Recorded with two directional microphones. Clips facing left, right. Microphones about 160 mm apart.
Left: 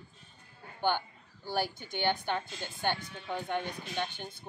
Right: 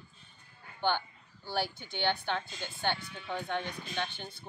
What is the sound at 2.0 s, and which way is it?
Speech, 10° left (ahead or behind).